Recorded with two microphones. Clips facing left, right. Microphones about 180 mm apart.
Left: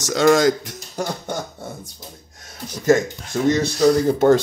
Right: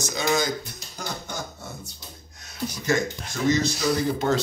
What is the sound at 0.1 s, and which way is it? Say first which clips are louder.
Speech: left 11 dB; 90° left.